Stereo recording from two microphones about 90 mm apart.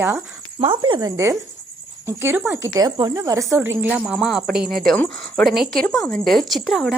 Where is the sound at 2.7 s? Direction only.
45° right (ahead or behind).